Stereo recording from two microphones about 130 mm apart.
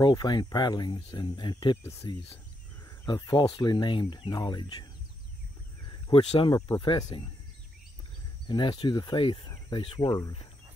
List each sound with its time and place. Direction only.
0.0 s speech: 35° left (ahead or behind)
1.8 s speech: 20° left (ahead or behind)
3.1 s speech: 35° left (ahead or behind)
5.9 s speech: 35° left (ahead or behind)
8.5 s speech: 35° left (ahead or behind)